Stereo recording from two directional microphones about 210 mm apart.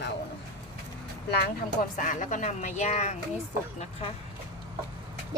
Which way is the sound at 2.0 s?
35° left (ahead or behind).